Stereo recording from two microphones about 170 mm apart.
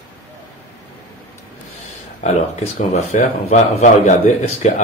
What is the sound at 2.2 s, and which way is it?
Speech, 45° left (ahead or behind).